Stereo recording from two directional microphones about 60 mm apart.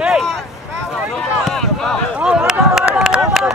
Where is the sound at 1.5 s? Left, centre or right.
Centre.